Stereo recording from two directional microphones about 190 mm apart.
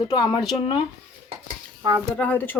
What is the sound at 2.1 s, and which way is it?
Speech, 10° left (ahead or behind).